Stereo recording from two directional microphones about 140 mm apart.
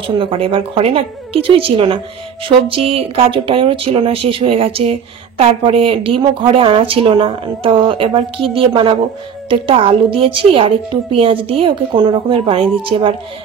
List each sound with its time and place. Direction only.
0.0 s a woman's voice: 40° right (ahead or behind)